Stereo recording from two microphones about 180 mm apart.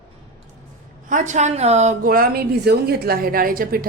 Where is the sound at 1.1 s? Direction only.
40° right (ahead or behind).